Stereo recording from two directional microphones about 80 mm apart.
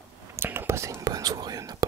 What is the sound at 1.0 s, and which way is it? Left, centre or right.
Whispering, right.